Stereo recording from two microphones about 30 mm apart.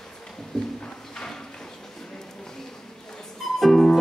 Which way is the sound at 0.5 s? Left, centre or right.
Left.